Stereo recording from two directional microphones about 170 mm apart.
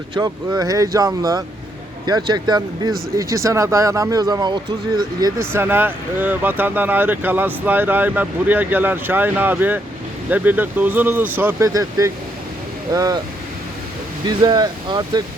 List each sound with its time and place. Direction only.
0.1 s speech: 25° right (ahead or behind)
14.3 s speech: 25° right (ahead or behind)